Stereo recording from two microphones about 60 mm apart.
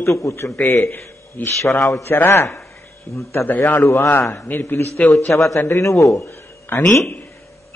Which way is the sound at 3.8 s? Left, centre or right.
Left.